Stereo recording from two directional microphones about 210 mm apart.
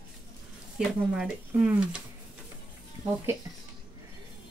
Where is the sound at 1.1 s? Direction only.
5° right (ahead or behind).